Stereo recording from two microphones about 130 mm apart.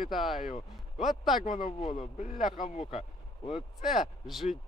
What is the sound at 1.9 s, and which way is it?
Speech, 80° left.